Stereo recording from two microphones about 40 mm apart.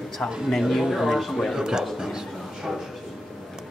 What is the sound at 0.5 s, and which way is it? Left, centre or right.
Speech, centre.